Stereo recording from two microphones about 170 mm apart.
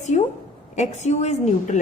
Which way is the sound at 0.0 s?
45° left (ahead or behind).